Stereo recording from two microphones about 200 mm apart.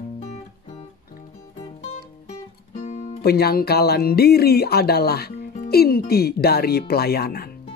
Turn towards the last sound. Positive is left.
turn(degrees=50)  # may be behind; listen again after turning